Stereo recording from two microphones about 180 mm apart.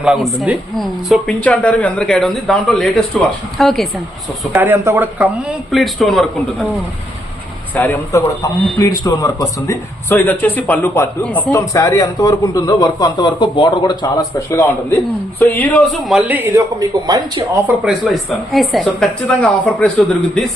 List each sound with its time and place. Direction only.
0.0 s speech: centre (ahead or behind)
4.5 s speech: 15° right (ahead or behind)
5.2 s speech: centre (ahead or behind)
7.7 s speech: 10° left (ahead or behind)
11.5 s a man's voice: 20° left (ahead or behind); by 17.6 s 20° right (ahead or behind)
17.7 s speech: centre (ahead or behind)